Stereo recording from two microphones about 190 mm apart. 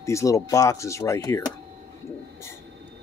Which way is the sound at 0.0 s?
15° left (ahead or behind).